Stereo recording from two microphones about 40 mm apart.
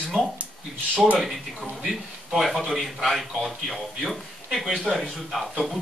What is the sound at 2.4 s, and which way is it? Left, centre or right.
A man's voice, centre.